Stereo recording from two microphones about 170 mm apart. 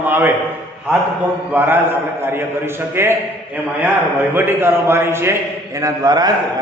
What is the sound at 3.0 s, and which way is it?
Speech, 15° right (ahead or behind).